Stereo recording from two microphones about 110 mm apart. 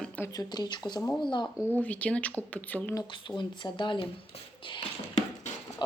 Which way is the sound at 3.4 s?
45° left (ahead or behind).